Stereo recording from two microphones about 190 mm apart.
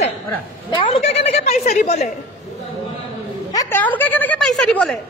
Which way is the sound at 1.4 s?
35° left (ahead or behind).